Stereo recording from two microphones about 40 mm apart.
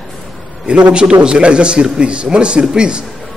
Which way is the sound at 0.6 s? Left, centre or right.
Right.